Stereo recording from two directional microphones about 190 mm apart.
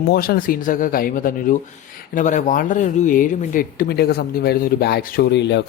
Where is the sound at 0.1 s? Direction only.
50° left (ahead or behind).